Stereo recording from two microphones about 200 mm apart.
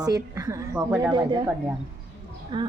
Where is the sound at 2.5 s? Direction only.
20° right (ahead or behind).